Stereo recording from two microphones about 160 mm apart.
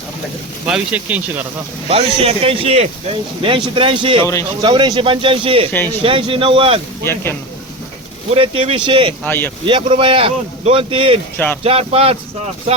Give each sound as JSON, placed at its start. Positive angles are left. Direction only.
{"t": 0.7, "sound": "speech", "side_deg": -10}
{"t": 1.9, "sound": "speech", "side_deg": -40}
{"t": 4.2, "sound": "a man's voice", "side_deg": 20}
{"t": 4.6, "sound": "speech", "side_deg": -30}
{"t": 5.7, "sound": "speech", "side_deg": 10}
{"t": 6.0, "sound": "speech", "side_deg": -35}
{"t": 7.0, "sound": "speech", "side_deg": 15}
{"t": 8.3, "sound": "speech", "side_deg": -35}
{"t": 9.2, "sound": "speech", "side_deg": 15}
{"t": 9.6, "sound": "speech", "side_deg": -30}